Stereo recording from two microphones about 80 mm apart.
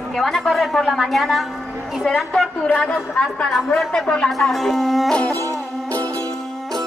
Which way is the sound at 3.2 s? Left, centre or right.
Centre.